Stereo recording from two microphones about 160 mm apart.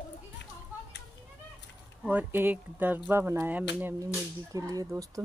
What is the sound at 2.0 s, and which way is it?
Speech, 10° right (ahead or behind).